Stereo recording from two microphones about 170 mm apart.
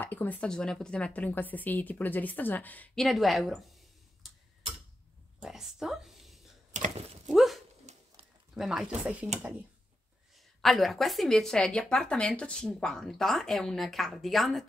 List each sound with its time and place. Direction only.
0.0 s speech: 10° left (ahead or behind)
5.4 s a sound: 5° right (ahead or behind)
6.7 s a sound: 40° right (ahead or behind)
7.2 s dog: centre (ahead or behind)
7.8 s pigeon: 40° right (ahead or behind)
8.5 s a woman's voice: 5° right (ahead or behind)
10.3 s a woman's voice: centre (ahead or behind)